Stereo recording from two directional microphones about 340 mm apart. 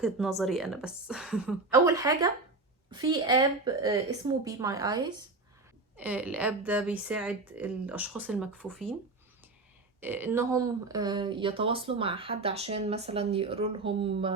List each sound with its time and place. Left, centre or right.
0.0 s a woman's voice: centre
10.0 s speech: centre